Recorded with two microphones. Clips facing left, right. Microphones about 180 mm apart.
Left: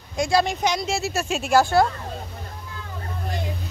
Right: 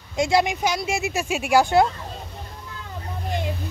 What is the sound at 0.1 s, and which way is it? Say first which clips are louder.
Speech: right 1 dB; 20° right (ahead or behind).